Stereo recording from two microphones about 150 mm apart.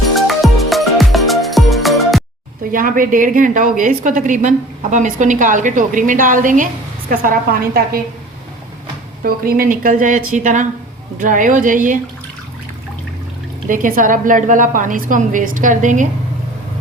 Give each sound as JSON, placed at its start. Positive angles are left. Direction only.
{"t": 0.1, "sound": "music", "side_deg": 0}
{"t": 2.7, "sound": "a woman's voice", "side_deg": -65}
{"t": 7.1, "sound": "a woman's voice", "side_deg": -80}
{"t": 9.2, "sound": "a woman's voice", "side_deg": -80}
{"t": 13.7, "sound": "a woman's voice", "side_deg": -65}